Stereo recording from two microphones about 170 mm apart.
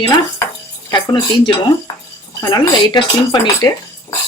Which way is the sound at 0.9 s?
25° left (ahead or behind).